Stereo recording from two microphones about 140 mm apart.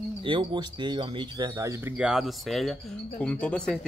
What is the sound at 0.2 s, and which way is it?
Speech, 35° right (ahead or behind).